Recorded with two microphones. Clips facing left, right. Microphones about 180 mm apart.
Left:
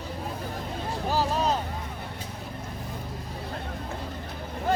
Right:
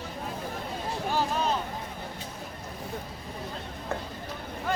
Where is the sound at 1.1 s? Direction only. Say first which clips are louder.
Left 3 dB; 40° left (ahead or behind).